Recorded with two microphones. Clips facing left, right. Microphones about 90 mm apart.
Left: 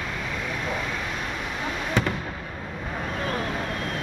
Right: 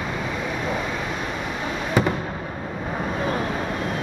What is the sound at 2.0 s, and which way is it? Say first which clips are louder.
Fireworks: right 5 dB; 10° right (ahead or behind).